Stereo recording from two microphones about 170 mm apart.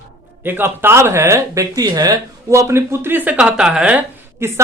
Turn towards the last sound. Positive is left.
turn(degrees=-15)  # may be behind; listen again after turning